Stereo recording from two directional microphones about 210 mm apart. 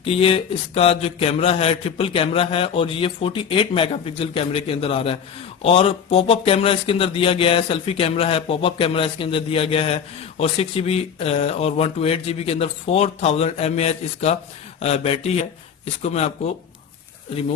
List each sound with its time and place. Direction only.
0.0 s speech: 25° left (ahead or behind)